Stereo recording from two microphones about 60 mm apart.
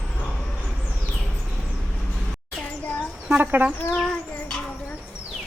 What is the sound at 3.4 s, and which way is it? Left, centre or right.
Speech, right.